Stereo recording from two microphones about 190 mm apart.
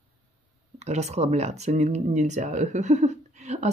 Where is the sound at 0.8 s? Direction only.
35° right (ahead or behind).